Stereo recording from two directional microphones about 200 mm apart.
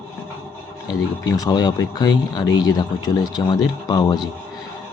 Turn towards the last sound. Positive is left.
turn(degrees=20)  # may be behind; listen again after turning